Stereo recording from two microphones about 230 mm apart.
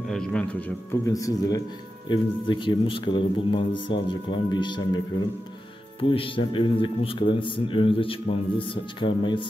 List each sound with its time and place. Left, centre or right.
0.1 s a man's voice: centre; by 9.5 s left